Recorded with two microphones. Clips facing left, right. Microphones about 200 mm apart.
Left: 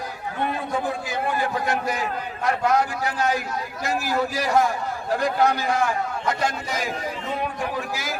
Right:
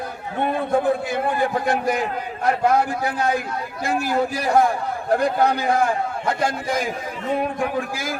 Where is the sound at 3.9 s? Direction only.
55° right (ahead or behind).